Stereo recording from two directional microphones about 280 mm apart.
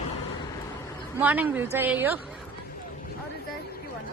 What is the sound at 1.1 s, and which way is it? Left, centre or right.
Speech, centre.